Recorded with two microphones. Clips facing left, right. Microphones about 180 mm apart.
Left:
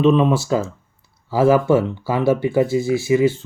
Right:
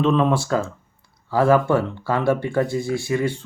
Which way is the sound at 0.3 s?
10° left (ahead or behind).